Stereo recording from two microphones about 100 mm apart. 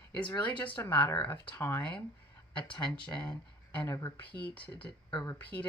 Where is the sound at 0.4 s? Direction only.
15° left (ahead or behind).